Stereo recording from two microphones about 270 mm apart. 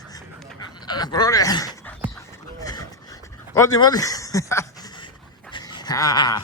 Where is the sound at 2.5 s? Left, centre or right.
Centre.